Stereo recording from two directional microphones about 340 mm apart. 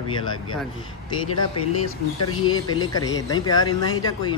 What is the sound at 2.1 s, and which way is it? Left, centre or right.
Speech, left.